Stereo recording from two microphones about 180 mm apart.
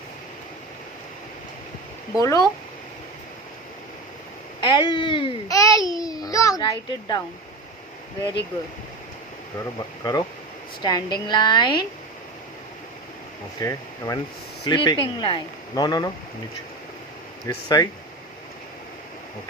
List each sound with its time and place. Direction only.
2.1 s speech: 20° left (ahead or behind)
4.6 s speech: 25° left (ahead or behind)
5.9 s a sound: 20° left (ahead or behind)
6.6 s speech: 20° left (ahead or behind)
10.0 s speech: 20° left (ahead or behind)
13.6 s speech: 20° left (ahead or behind)
17.4 s speech: 20° left (ahead or behind)